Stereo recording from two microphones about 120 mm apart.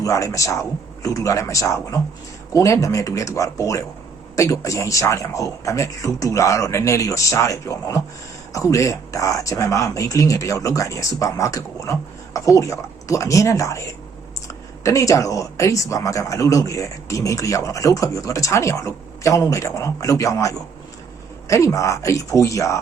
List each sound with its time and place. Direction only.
0.0 s speech: 25° left (ahead or behind)